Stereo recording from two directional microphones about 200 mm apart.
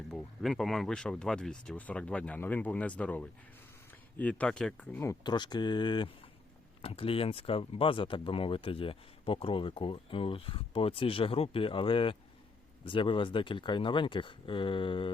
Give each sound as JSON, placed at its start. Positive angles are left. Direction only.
{"t": 0.1, "sound": "speech", "side_deg": 0}